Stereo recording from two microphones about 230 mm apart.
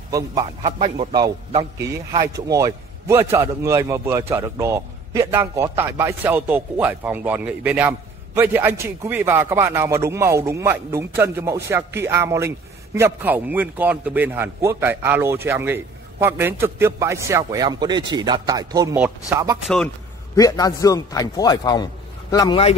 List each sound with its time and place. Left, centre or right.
0.1 s speech: centre
0.6 s a man's voice: right
0.9 s a man's voice: centre
20.3 s a man's voice: centre